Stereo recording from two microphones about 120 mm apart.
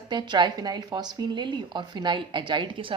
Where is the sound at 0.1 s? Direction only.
40° right (ahead or behind).